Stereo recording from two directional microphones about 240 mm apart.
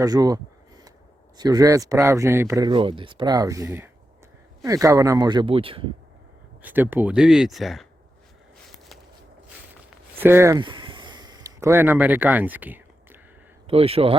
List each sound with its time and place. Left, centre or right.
0.0 s speech: centre
1.4 s speech: centre
6.6 s speech: centre
10.2 s a sound: centre
13.7 s speech: right